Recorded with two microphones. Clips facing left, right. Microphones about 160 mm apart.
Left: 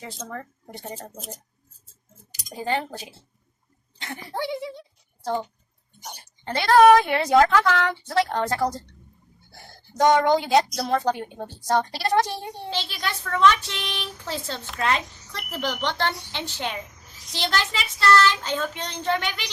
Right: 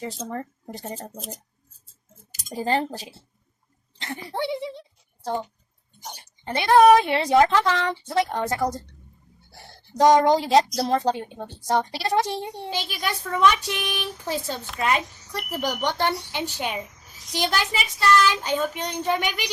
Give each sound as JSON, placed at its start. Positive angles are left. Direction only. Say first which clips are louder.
{"t": 0.0, "sound": "speech", "louder": "right 4 dB", "side_deg": -30}
{"t": 2.6, "sound": "speech", "louder": "right 3 dB", "side_deg": -35}
{"t": 4.4, "sound": "speech", "louder": "right 1 dB", "side_deg": -30}
{"t": 6.4, "sound": "a woman's voice", "louder": "even", "side_deg": -15}
{"t": 10.0, "sound": "a woman's voice", "louder": "right 2 dB", "side_deg": -35}